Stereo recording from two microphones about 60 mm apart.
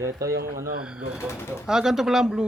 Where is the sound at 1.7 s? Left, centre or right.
Centre.